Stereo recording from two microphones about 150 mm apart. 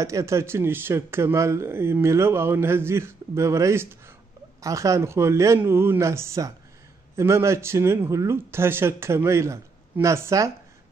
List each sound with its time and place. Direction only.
0.0 s speech: 20° right (ahead or behind)